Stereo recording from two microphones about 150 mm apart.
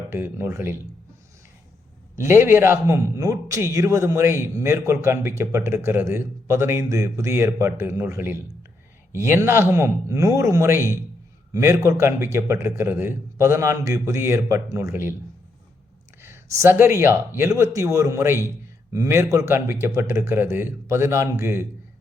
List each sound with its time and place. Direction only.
0.1 s a man's voice: 15° right (ahead or behind)
2.1 s a man's voice: 15° right (ahead or behind)
16.2 s a man's voice: 20° right (ahead or behind)